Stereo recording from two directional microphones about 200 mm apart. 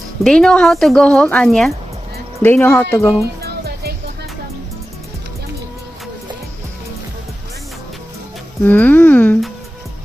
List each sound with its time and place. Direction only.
0.2 s speech: 5° left (ahead or behind)
3.4 s music: 50° right (ahead or behind)
8.6 s speech: 10° left (ahead or behind)